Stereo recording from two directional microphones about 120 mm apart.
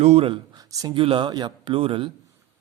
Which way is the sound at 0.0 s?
60° right (ahead or behind).